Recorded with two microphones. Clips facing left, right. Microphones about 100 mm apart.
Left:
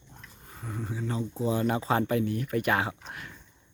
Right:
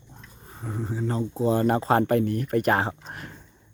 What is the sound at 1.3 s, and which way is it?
Speech, 60° right (ahead or behind).